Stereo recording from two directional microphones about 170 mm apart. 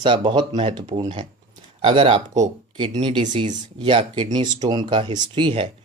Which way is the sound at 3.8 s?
30° right (ahead or behind).